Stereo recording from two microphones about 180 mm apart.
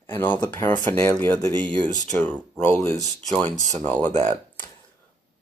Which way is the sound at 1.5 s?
25° right (ahead or behind).